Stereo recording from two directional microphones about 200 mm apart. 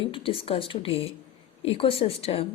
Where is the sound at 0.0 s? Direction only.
25° left (ahead or behind).